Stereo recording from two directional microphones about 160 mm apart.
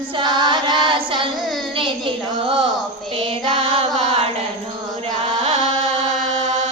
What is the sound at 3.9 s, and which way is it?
Chant, 40° right (ahead or behind).